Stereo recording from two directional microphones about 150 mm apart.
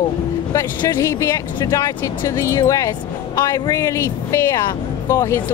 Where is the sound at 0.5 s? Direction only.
20° left (ahead or behind).